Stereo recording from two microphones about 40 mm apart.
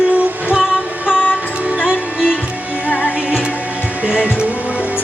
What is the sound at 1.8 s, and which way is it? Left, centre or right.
Music, centre.